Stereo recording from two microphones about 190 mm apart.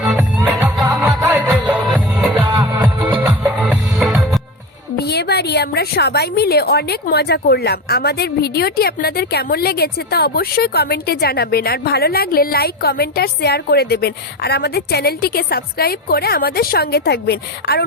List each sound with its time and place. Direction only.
0.0 s music: 5° right (ahead or behind)
2.6 s music: 25° right (ahead or behind)
3.4 s music: 5° right (ahead or behind)
4.9 s a woman's voice: 60° left (ahead or behind)